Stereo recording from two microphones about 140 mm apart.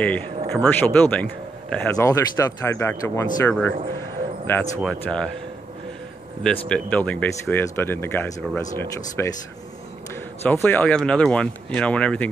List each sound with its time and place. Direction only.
0.5 s speech: 10° left (ahead or behind)
2.0 s speech: 20° left (ahead or behind); by 5.3 s 5° left (ahead or behind)
6.4 s speech: 10° left (ahead or behind)